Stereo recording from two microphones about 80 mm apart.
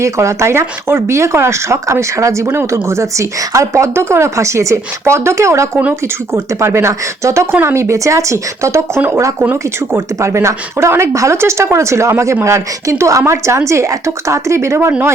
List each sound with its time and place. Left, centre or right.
0.0 s speech: right
9.0 s speech: right
10.2 s speech: right